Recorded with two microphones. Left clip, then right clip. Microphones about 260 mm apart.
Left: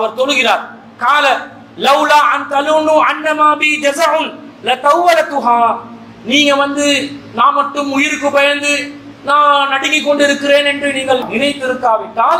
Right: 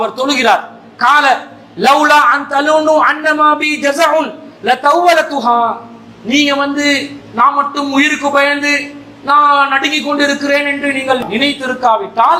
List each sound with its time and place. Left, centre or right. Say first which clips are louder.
0.2 s a man's voice: right 1 dB; right
6.2 s a man's voice: left 1 dB; right